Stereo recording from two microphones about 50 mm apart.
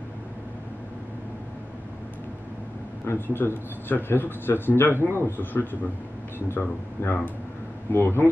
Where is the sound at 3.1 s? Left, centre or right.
Left.